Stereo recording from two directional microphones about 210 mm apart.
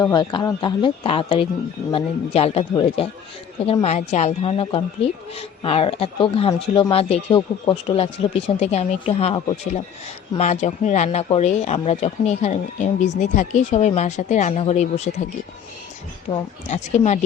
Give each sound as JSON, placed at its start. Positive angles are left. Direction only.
{"t": 0.0, "sound": "speech", "side_deg": 20}
{"t": 16.3, "sound": "speech", "side_deg": 30}